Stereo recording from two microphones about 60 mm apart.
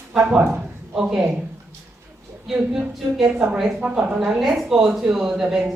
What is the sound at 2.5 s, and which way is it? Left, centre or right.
Speech, centre.